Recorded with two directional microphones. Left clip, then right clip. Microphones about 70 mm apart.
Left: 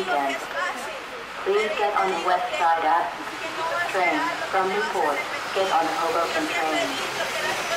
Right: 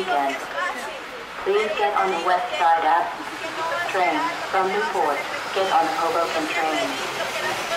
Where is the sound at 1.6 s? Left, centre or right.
Centre.